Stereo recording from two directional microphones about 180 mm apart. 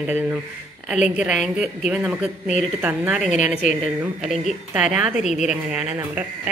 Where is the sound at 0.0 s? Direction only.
10° right (ahead or behind).